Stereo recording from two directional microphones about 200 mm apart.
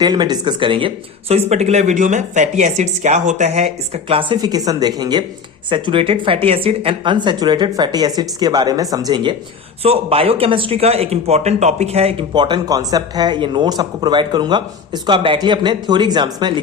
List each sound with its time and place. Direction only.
0.0 s speech: 20° right (ahead or behind)